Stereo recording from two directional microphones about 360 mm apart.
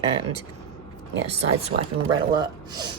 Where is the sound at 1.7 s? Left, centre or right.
Right.